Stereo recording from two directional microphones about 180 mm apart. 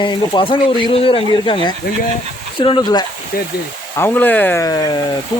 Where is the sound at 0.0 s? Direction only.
25° left (ahead or behind).